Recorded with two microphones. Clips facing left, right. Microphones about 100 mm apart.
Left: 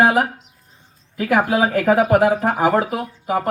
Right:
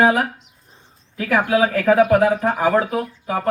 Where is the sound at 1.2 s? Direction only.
20° left (ahead or behind).